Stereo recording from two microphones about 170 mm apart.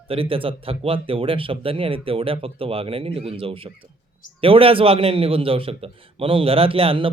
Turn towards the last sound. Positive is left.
turn(degrees=-30)  # may be behind; listen again after turning